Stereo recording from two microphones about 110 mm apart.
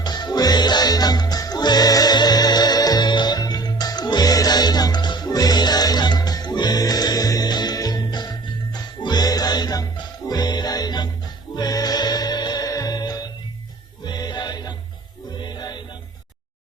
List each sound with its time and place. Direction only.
0.0 s music: 40° left (ahead or behind)